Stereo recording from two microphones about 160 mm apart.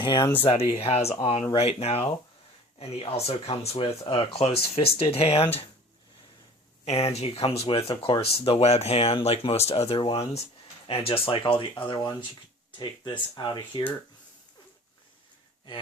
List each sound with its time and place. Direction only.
0.0 s speech: 30° left (ahead or behind)
0.8 s speech: 40° left (ahead or behind)
6.8 s speech: 40° left (ahead or behind); by 13.8 s 25° left (ahead or behind)